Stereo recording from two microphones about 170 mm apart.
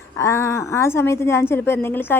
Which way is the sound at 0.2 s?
15° left (ahead or behind).